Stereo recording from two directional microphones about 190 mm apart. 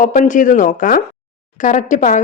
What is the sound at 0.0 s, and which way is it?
A woman's voice, 45° left (ahead or behind).